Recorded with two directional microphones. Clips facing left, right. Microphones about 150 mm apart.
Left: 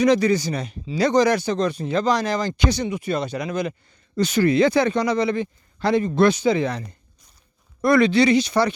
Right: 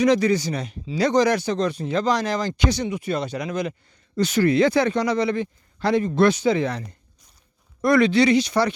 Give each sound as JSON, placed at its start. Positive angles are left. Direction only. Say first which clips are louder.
{"t": 0.0, "sound": "speech", "louder": "left 1 dB", "side_deg": 40}
{"t": 4.1, "sound": "a man's voice", "louder": "left 1 dB", "side_deg": 15}
{"t": 7.8, "sound": "speech", "louder": "left 1 dB", "side_deg": 35}